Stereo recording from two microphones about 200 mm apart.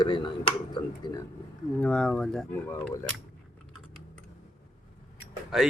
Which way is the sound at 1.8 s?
5° left (ahead or behind).